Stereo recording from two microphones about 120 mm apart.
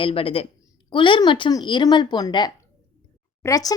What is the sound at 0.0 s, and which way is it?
A woman's voice, 50° left (ahead or behind).